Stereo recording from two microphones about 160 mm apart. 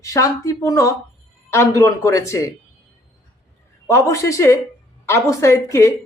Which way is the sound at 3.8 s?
15° left (ahead or behind).